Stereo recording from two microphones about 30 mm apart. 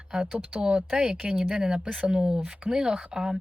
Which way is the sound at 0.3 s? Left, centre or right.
Right.